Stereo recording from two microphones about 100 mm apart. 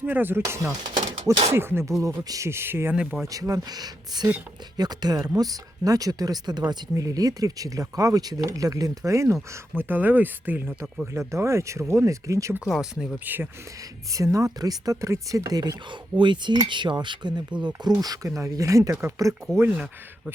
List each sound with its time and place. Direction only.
0.0 s speech: 20° right (ahead or behind)
1.1 s speech: 90° right
1.5 s speech: 25° right (ahead or behind)
3.2 s speech: 35° right (ahead or behind)
12.6 s speech: 5° right (ahead or behind)
13.2 s speech: 20° right (ahead or behind)
14.1 s speech: 35° right (ahead or behind); by 17.4 s 50° right (ahead or behind)
18.0 s speech: 35° right (ahead or behind)
19.7 s speech: 10° right (ahead or behind)